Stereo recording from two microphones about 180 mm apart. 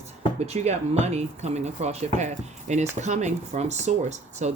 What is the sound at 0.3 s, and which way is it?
Speech, 35° right (ahead or behind).